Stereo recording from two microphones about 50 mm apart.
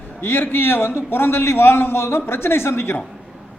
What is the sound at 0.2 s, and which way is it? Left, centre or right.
A man's voice, left.